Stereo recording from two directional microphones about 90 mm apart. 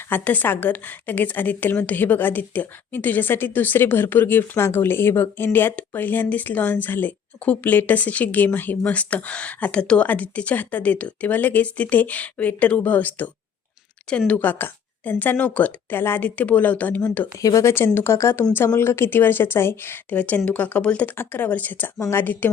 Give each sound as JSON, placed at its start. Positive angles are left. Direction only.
{"t": 0.1, "sound": "a woman's voice", "side_deg": 20}
{"t": 17.4, "sound": "speech", "side_deg": 40}
{"t": 17.7, "sound": "a woman's voice", "side_deg": 25}